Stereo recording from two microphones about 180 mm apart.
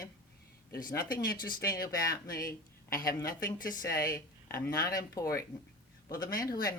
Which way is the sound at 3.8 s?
20° left (ahead or behind).